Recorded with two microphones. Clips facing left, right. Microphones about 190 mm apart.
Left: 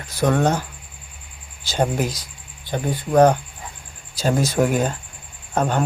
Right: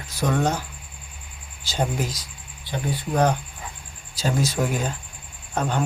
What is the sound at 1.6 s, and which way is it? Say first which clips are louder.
Speech: left 5 dB; 60° left (ahead or behind).